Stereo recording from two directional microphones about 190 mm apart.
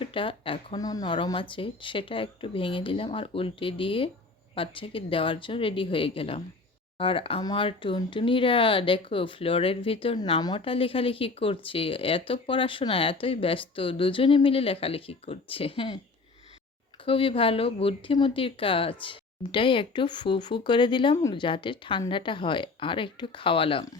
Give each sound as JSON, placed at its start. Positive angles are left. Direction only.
{"t": 0.0, "sound": "speech", "side_deg": 25}
{"t": 17.1, "sound": "speech", "side_deg": 30}